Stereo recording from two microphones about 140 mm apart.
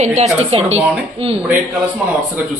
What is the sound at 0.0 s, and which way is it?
Speech, 55° right (ahead or behind).